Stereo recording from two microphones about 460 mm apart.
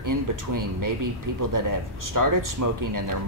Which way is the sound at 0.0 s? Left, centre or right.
Right.